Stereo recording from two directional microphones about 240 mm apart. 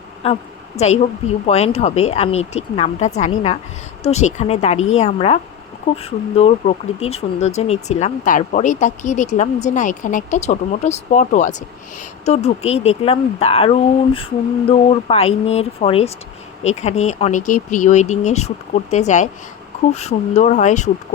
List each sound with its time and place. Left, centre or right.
0.2 s speech: left